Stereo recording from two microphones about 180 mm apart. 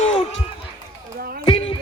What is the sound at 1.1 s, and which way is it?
Basketball bounce, 55° right (ahead or behind).